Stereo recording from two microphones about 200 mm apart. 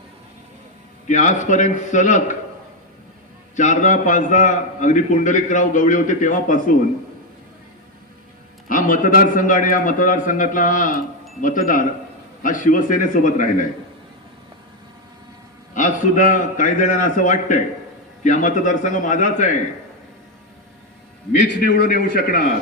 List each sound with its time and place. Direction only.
1.0 s a man's voice: 40° left (ahead or behind)
3.5 s a man's voice: 40° left (ahead or behind)
8.6 s a man's voice: 45° left (ahead or behind)
15.7 s a man's voice: 40° left (ahead or behind)
21.4 s a man's voice: 60° left (ahead or behind)